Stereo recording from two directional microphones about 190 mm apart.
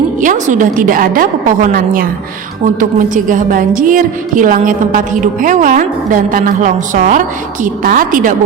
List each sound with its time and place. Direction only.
0.2 s a woman's voice: 40° right (ahead or behind)
3.2 s a woman's voice: 40° right (ahead or behind)